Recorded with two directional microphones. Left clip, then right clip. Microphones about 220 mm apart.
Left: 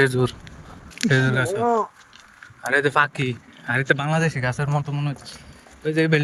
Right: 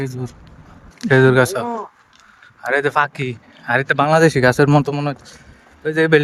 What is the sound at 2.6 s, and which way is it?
Speech, 10° right (ahead or behind).